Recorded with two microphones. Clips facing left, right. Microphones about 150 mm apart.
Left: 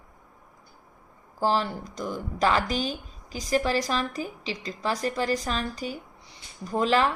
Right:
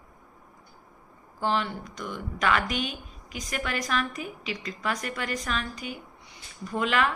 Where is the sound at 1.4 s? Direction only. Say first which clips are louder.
Left 3 dB; 35° left (ahead or behind).